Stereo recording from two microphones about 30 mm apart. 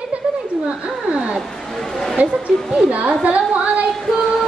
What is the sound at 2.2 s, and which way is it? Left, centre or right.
Speech, right.